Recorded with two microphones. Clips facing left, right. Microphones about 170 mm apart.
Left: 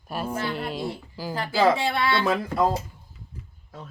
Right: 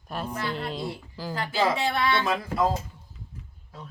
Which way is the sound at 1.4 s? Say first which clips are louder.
Left 4 dB; 30° left (ahead or behind).